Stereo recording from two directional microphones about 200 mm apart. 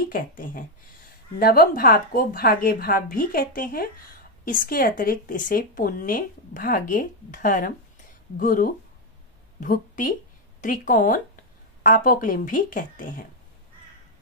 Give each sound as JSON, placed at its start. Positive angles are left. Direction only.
{"t": 0.1, "sound": "speech", "side_deg": 45}